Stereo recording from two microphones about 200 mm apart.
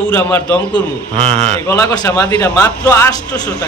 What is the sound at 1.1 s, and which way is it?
Speech, 30° right (ahead or behind).